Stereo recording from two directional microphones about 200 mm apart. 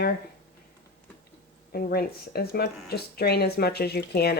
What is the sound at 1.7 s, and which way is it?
Speech, 50° left (ahead or behind).